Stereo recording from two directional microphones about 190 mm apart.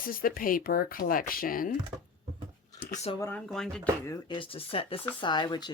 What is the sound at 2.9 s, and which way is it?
Speech, 35° left (ahead or behind).